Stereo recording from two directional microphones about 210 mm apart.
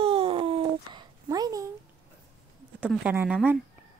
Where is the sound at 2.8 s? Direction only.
5° right (ahead or behind).